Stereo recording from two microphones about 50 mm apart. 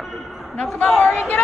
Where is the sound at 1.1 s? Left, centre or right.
Left.